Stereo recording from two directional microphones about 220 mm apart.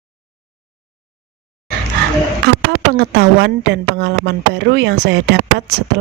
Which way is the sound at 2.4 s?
50° right (ahead or behind).